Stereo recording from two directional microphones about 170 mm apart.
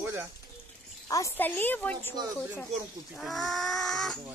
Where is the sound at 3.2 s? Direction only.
Centre (ahead or behind).